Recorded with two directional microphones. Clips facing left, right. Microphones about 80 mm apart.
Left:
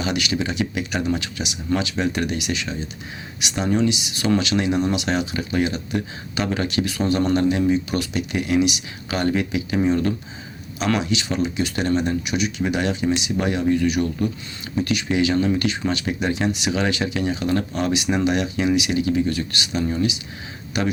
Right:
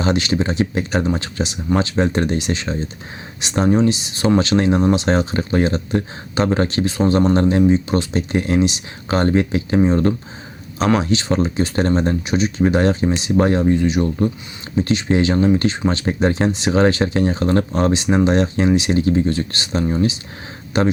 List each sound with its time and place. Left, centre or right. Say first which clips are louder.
0.0 s speech: right 5 dB; right